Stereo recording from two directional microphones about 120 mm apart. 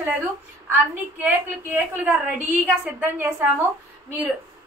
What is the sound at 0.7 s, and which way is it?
A woman's voice, 15° right (ahead or behind).